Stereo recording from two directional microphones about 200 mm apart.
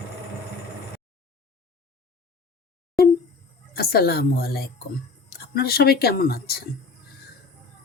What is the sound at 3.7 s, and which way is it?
Speech, 50° left (ahead or behind).